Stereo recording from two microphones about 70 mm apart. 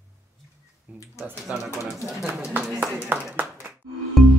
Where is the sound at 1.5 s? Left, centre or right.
Centre.